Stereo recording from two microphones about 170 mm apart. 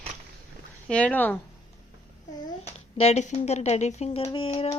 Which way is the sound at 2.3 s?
20° left (ahead or behind).